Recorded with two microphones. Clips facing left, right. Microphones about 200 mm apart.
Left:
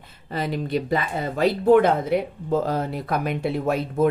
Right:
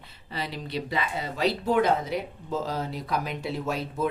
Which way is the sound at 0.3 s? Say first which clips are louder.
Left 8 dB; 50° left (ahead or behind).